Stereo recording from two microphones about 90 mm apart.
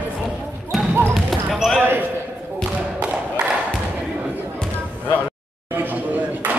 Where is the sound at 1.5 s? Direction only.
Centre (ahead or behind).